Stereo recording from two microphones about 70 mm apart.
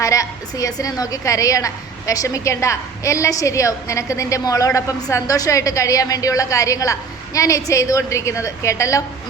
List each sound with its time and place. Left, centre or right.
0.0 s a woman's voice: left